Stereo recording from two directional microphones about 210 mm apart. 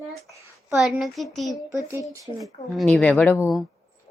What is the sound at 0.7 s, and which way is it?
Speech, 5° right (ahead or behind).